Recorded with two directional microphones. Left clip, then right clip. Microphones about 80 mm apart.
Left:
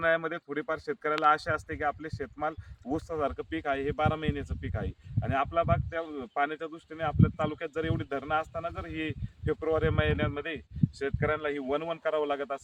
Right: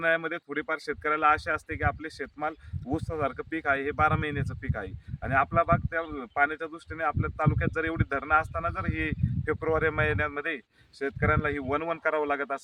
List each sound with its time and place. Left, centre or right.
0.0 s speech: centre
11.0 s speech: left